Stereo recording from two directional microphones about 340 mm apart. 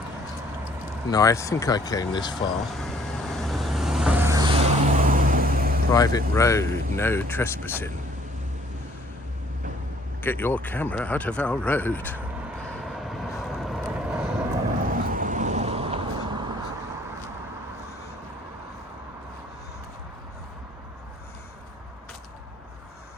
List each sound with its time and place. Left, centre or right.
1.1 s speech: centre
2.3 s vehicle: centre; by 5.8 s right
5.9 s speech: centre
10.2 s speech: centre
12.6 s vehicle: centre
14.9 s vehicle: right